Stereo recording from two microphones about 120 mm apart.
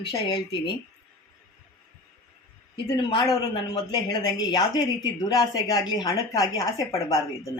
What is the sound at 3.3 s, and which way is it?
A woman's voice, 35° left (ahead or behind).